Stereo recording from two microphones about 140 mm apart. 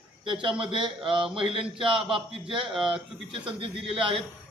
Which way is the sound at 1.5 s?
40° right (ahead or behind).